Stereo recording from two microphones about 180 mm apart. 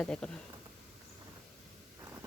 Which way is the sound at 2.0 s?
15° right (ahead or behind).